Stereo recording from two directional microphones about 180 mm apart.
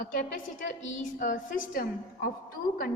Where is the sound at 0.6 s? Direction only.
45° left (ahead or behind).